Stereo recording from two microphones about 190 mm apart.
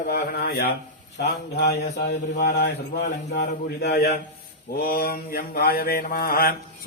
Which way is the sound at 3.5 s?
55° left (ahead or behind).